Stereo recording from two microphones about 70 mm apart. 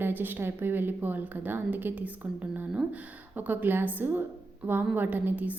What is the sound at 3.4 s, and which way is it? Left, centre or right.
A woman's voice, right.